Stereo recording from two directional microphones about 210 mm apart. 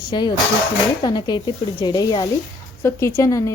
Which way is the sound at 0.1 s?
20° left (ahead or behind).